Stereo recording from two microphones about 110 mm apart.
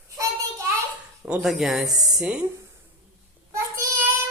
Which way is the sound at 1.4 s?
Centre (ahead or behind).